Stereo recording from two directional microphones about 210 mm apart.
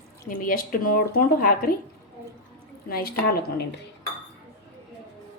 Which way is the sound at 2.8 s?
45° left (ahead or behind).